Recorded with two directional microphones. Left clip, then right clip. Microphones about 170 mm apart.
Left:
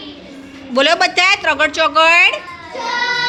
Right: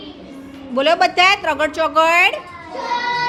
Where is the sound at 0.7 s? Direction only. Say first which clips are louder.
Left 2 dB; centre (ahead or behind); by 2.4 s 15° right (ahead or behind).